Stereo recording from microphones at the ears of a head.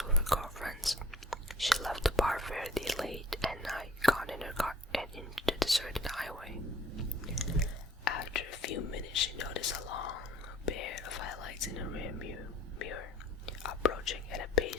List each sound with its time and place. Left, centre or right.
0.0 s whispering: centre
8.0 s whispering: left